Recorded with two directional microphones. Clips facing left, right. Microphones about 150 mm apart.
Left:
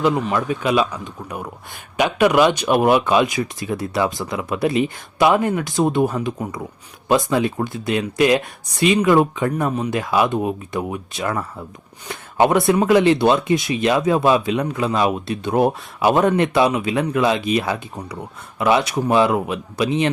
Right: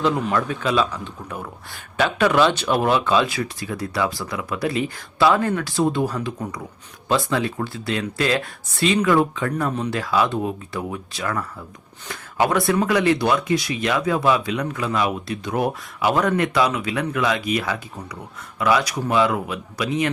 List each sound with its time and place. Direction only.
0.0 s a man's voice: 5° left (ahead or behind); by 20.1 s 25° left (ahead or behind)